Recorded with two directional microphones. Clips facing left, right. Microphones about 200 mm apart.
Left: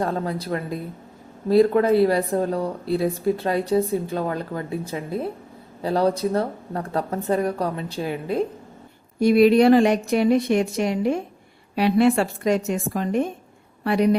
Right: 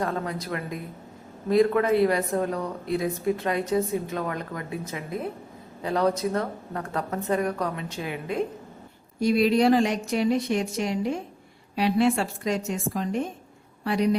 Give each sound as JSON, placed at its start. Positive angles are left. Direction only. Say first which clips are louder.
{"t": 0.0, "sound": "speech", "louder": "left 4 dB", "side_deg": 30}
{"t": 9.2, "sound": "a woman's voice", "louder": "left 6 dB", "side_deg": 60}